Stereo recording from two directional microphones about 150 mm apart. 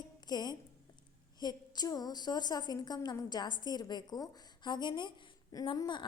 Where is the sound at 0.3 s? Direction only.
30° left (ahead or behind).